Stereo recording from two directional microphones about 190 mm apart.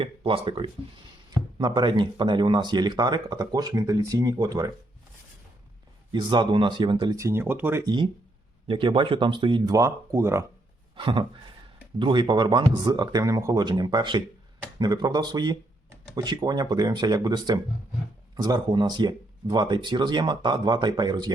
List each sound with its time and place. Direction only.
0.0 s speech: 30° right (ahead or behind)
6.1 s speech: 25° right (ahead or behind)
10.9 s speech: 25° right (ahead or behind)